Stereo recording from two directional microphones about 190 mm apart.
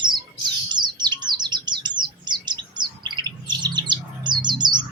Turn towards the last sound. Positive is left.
turn(degrees=-25)  # may be behind; listen again after turning